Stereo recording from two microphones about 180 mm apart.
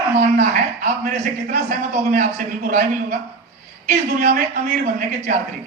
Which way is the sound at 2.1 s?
50° right (ahead or behind).